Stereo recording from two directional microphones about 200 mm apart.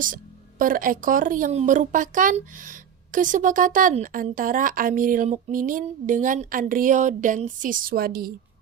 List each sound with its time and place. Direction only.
0.6 s a woman's voice: 45° right (ahead or behind)